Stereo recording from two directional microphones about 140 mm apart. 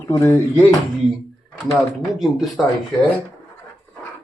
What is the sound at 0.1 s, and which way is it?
Speech, 15° left (ahead or behind).